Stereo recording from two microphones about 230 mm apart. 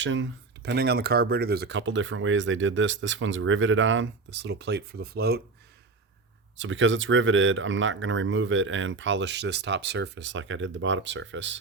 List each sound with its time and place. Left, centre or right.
0.0 s speech: right
6.6 s speech: right